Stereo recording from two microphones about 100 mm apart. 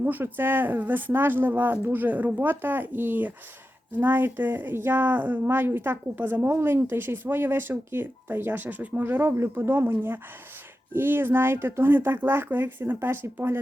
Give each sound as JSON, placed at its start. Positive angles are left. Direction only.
{"t": 0.0, "sound": "speech", "side_deg": -20}